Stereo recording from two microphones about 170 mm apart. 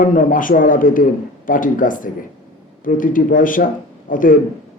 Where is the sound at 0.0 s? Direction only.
50° left (ahead or behind).